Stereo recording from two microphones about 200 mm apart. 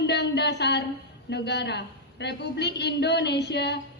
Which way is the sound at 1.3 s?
55° left (ahead or behind).